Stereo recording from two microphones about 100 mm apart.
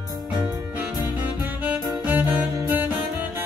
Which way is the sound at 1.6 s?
15° right (ahead or behind).